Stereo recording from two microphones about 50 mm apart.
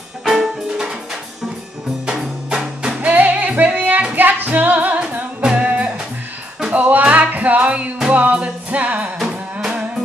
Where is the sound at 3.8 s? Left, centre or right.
Right.